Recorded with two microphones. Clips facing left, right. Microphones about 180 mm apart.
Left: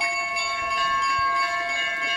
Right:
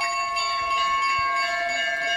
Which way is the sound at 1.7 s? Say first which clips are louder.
Right 3 dB; 40° right (ahead or behind).